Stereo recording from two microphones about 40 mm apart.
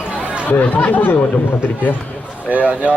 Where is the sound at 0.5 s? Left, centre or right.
Left.